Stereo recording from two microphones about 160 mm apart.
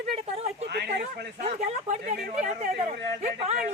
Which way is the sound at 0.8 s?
70° right (ahead or behind).